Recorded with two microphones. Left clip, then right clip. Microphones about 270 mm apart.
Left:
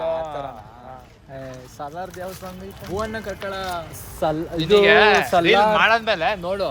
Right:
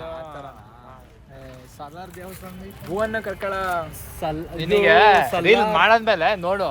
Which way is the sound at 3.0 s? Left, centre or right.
Right.